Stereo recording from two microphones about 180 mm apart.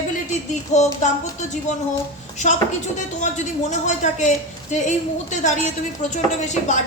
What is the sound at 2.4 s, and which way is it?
A woman's voice, 45° left (ahead or behind).